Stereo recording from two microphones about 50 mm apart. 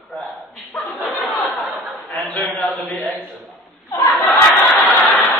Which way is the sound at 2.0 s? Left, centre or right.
Left.